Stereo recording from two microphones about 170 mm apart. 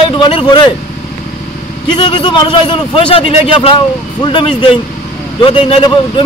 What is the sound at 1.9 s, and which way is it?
A man's voice, 30° left (ahead or behind).